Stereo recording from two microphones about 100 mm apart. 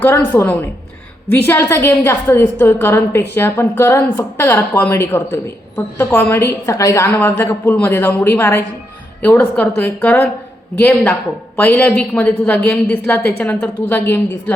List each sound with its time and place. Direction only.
0.0 s a woman's voice: 20° left (ahead or behind)
11.5 s a woman's voice: 15° left (ahead or behind)